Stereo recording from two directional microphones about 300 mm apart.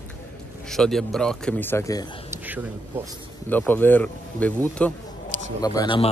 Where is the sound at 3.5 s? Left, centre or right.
Centre.